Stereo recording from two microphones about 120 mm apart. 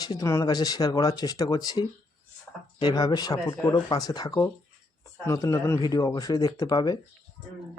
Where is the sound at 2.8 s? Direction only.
35° left (ahead or behind).